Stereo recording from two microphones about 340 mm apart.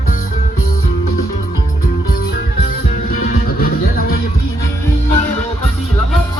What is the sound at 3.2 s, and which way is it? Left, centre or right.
Music, left.